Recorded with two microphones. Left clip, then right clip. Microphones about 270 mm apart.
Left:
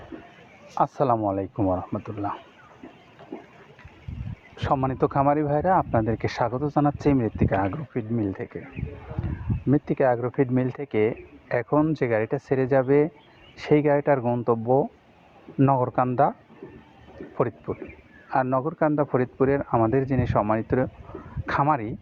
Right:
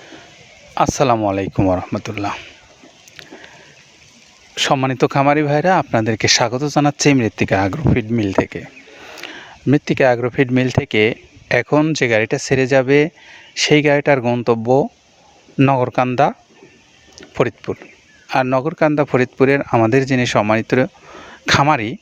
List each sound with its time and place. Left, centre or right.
0.7 s speech: right
4.5 s speech: right
9.6 s speech: right
17.2 s a sound: right
18.3 s speech: right